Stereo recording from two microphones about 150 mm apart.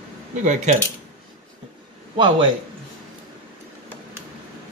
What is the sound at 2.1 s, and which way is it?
Speech, 35° right (ahead or behind).